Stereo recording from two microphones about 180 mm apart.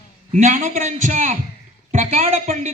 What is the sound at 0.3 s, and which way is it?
A man's voice, 45° right (ahead or behind).